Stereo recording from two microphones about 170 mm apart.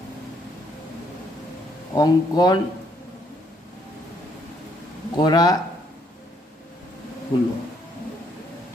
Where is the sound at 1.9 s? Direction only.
20° left (ahead or behind).